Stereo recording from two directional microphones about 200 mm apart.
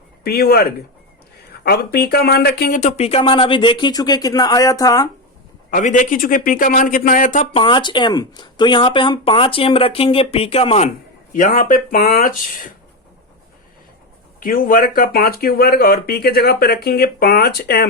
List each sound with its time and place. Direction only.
0.3 s speech: 50° left (ahead or behind); by 5.0 s 20° left (ahead or behind)
5.7 s speech: 40° left (ahead or behind)
7.5 s speech: 25° left (ahead or behind)
11.3 s speech: 40° left (ahead or behind)
14.3 s speech: 45° left (ahead or behind)